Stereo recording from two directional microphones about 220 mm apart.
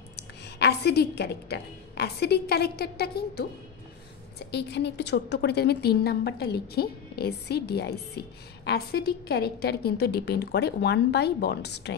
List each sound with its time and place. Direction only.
0.1 s a woman's voice: 50° left (ahead or behind)